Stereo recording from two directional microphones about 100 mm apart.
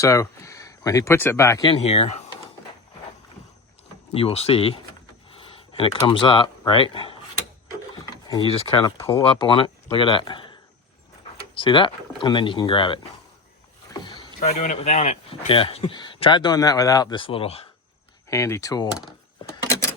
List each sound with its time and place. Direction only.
0.0 s speech: 30° left (ahead or behind)
1.7 s speech: 85° left
4.1 s speech: 85° left; by 7.2 s 55° left (ahead or behind)
8.0 s rub: 40° left (ahead or behind)
8.4 s speech: 65° left (ahead or behind)
11.5 s speech: 60° left (ahead or behind)
13.9 s rowboat: 45° left (ahead or behind)
14.3 s speech: 90° left; by 16.0 s 65° left (ahead or behind)
16.0 s speech: 50° left (ahead or behind)
17.2 s speech: 70° left (ahead or behind)
18.3 s speech: 30° left (ahead or behind)